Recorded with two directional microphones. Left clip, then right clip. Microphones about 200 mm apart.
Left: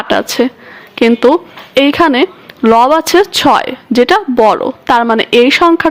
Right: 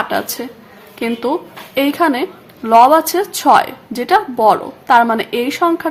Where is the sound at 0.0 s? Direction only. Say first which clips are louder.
Left 7 dB; 40° left (ahead or behind).